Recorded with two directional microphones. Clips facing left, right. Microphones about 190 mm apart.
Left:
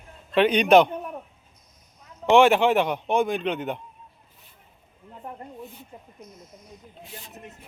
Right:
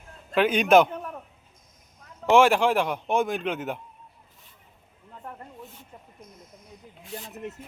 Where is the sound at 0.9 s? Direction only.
15° left (ahead or behind).